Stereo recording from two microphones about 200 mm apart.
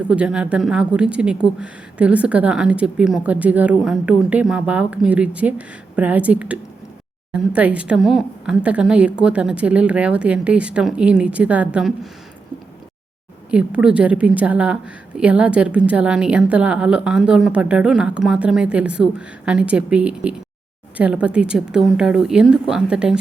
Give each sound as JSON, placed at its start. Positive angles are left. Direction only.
{"t": 0.1, "sound": "a woman's voice", "side_deg": -5}
{"t": 13.5, "sound": "a woman's voice", "side_deg": -5}